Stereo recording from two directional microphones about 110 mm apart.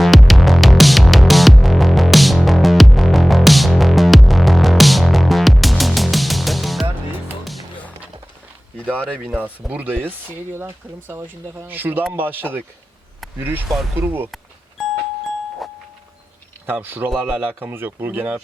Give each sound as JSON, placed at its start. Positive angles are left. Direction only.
{"t": 0.0, "sound": "music", "side_deg": 0}
{"t": 8.9, "sound": "speech", "side_deg": -15}
{"t": 15.6, "sound": "music", "side_deg": 0}
{"t": 16.6, "sound": "speech", "side_deg": -15}